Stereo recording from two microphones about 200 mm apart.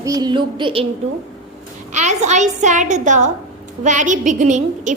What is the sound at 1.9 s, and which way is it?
A woman's voice, 35° right (ahead or behind).